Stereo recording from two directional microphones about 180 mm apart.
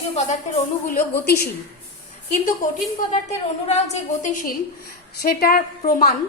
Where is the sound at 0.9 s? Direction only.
55° left (ahead or behind).